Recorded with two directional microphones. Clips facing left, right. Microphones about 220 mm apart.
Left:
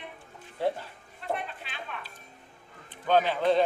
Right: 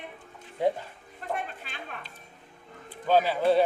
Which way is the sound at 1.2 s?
45° right (ahead or behind).